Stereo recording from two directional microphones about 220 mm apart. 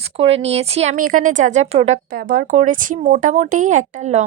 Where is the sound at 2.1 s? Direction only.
40° right (ahead or behind).